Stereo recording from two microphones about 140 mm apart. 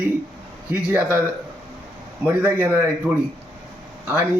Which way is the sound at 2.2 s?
15° right (ahead or behind).